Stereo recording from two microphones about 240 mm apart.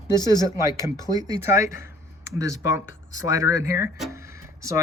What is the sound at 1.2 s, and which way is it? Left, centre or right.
Speech, centre.